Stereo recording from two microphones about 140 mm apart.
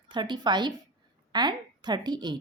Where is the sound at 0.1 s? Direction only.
30° right (ahead or behind).